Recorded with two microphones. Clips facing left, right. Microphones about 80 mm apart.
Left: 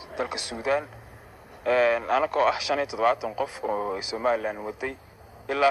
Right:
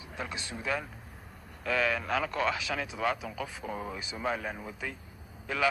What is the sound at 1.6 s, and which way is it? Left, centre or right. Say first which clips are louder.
Speech: left 8 dB; left.